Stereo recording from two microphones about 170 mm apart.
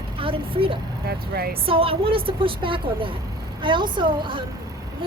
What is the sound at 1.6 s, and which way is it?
A woman's voice, 30° right (ahead or behind).